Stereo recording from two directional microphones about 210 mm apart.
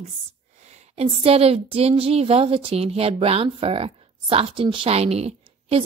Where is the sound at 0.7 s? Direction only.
30° right (ahead or behind).